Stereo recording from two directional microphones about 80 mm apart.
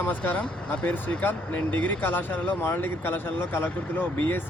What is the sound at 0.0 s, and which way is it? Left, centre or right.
Speech, centre.